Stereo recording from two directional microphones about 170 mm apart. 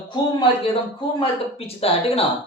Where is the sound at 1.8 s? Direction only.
35° left (ahead or behind).